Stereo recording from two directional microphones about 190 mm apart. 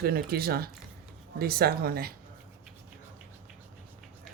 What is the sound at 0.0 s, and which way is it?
Speech, 55° right (ahead or behind).